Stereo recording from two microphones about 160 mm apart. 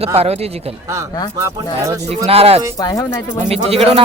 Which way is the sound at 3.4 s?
40° right (ahead or behind).